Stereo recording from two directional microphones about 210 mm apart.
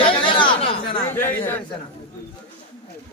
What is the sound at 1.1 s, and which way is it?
Speech, 10° left (ahead or behind).